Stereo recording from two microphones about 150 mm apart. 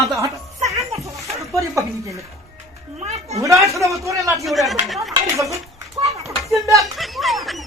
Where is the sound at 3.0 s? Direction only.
45° right (ahead or behind).